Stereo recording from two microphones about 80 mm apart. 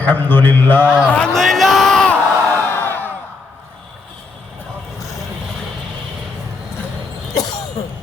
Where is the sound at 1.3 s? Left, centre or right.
Centre.